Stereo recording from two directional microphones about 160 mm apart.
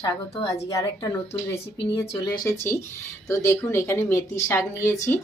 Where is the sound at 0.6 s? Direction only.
20° left (ahead or behind).